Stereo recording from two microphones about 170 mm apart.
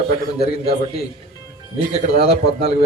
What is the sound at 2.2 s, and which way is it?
Speech, 65° left (ahead or behind).